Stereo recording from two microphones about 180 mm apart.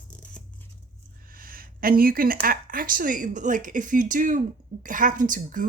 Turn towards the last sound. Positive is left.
turn(degrees=-50)  # may be behind; listen again after turning